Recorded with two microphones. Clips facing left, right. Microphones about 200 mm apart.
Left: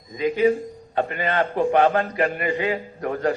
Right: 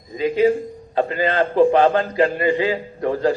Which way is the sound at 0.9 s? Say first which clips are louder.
Right 4 dB; 30° right (ahead or behind).